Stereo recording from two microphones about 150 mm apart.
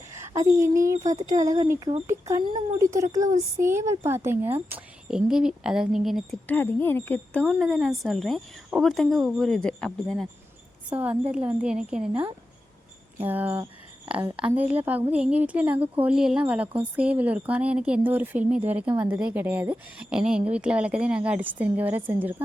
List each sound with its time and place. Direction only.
0.1 s a woman's voice: 15° right (ahead or behind); by 6.2 s centre (ahead or behind)
6.5 s speech: 15° left (ahead or behind)
7.4 s a woman's voice: centre (ahead or behind)
10.9 s a woman's voice: 10° right (ahead or behind)
13.1 s a woman's voice: 10° right (ahead or behind)